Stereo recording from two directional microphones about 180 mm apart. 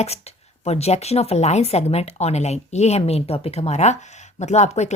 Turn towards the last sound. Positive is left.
turn(degrees=40)  # may be behind; listen again after turning